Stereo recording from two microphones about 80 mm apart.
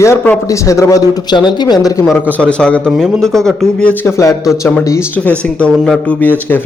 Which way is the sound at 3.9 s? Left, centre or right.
Left.